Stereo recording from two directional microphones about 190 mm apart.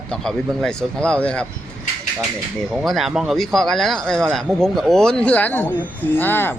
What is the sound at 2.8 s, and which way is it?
Speech, centre (ahead or behind).